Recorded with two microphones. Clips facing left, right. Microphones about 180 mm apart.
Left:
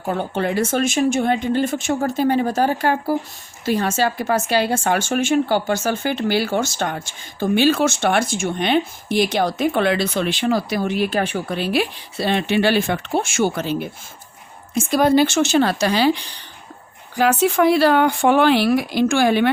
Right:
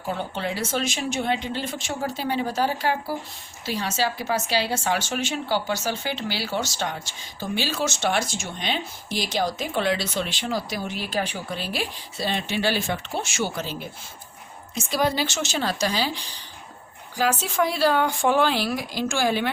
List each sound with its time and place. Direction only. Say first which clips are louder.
0.0 s speech: left 6 dB; 50° left (ahead or behind)